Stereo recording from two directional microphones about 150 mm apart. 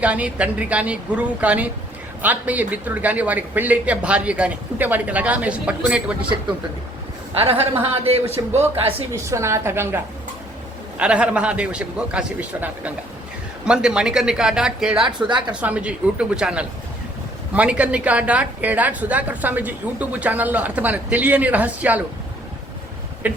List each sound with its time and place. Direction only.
0.0 s a woman's voice: 10° right (ahead or behind)
7.3 s a man's voice: 40° right (ahead or behind)
9.1 s a woman's voice: 20° right (ahead or behind); by 15.1 s 5° right (ahead or behind)
15.3 s a man's voice: 30° right (ahead or behind)
15.6 s a woman's voice: 10° right (ahead or behind)
23.2 s a sound: 10° right (ahead or behind)